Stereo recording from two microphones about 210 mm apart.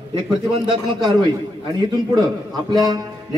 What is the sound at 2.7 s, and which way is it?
Speech, 20° right (ahead or behind).